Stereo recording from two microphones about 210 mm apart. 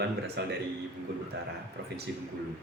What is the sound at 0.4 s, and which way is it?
Speech, 50° right (ahead or behind).